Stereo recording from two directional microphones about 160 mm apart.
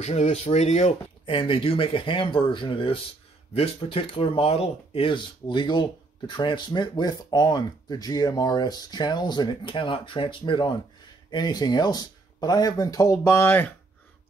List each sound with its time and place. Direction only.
0.0 s speech: 45° left (ahead or behind); by 13.7 s 10° left (ahead or behind)